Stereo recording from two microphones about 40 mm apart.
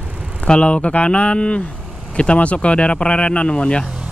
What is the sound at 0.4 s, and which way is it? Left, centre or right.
Speech, left.